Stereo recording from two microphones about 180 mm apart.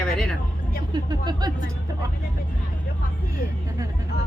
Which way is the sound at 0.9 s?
25° right (ahead or behind).